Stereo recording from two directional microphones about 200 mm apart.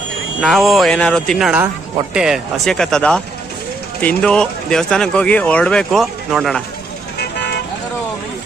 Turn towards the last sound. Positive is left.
turn(degrees=55)  # may be behind; listen again after turning